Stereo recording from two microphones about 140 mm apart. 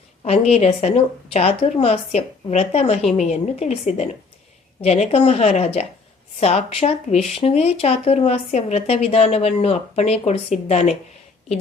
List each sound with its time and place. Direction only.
0.3 s speech: 50° left (ahead or behind)